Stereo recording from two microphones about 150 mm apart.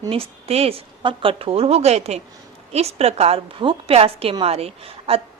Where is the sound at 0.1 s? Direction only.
40° right (ahead or behind).